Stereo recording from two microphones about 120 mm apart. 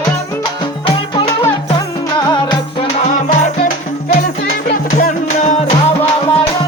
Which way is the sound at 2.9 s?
85° left.